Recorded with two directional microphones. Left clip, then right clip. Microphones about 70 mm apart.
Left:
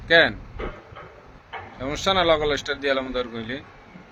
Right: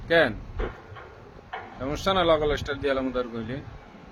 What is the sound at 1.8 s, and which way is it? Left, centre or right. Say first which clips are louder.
A man's voice: left 3 dB; centre.